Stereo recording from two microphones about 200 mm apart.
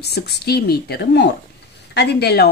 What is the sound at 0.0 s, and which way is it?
Speech, 55° left (ahead or behind).